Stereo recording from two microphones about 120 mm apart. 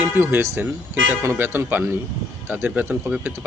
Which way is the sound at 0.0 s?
15° right (ahead or behind).